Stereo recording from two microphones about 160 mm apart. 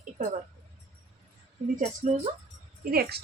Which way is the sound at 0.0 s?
50° right (ahead or behind).